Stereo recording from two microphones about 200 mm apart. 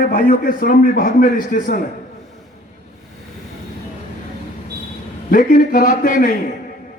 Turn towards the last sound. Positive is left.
turn(degrees=40)  # may be behind; listen again after turning